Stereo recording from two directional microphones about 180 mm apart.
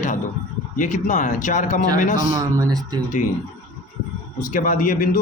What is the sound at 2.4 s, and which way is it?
Speech, 20° right (ahead or behind).